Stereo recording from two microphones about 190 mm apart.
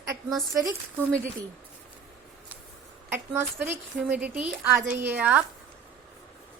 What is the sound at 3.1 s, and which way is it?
Speech, 15° right (ahead or behind).